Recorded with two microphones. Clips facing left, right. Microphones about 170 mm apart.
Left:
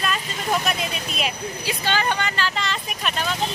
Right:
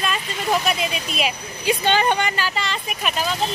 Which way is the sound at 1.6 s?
20° right (ahead or behind).